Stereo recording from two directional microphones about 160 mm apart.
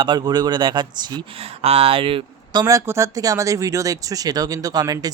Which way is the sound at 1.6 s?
40° right (ahead or behind).